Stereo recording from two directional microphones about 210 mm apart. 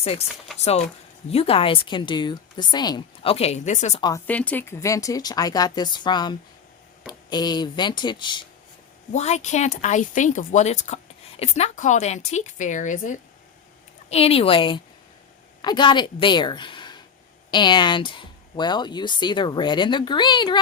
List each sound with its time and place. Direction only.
1.3 s speech: 30° left (ahead or behind)
4.3 s speech: 5° left (ahead or behind); by 8.4 s 20° left (ahead or behind)
9.1 s a woman's voice: 35° left (ahead or behind)